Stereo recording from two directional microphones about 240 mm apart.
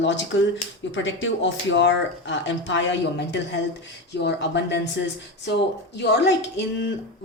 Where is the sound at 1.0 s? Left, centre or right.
Left.